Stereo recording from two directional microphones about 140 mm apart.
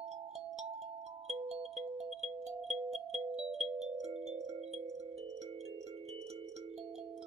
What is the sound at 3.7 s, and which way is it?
Music, 50° right (ahead or behind).